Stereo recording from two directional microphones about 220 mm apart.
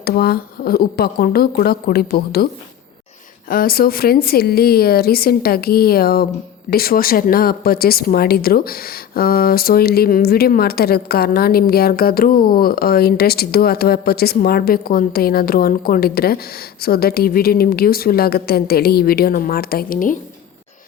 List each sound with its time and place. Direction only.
0.0 s speech: 45° left (ahead or behind)
3.5 s speech: 40° left (ahead or behind)